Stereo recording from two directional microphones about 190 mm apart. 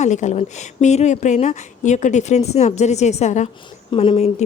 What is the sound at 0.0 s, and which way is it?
Speech, 40° left (ahead or behind).